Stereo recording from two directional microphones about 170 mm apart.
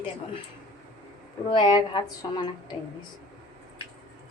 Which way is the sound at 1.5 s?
25° left (ahead or behind).